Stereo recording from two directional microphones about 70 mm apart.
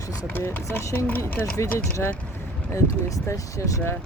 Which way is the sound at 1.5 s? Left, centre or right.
Left.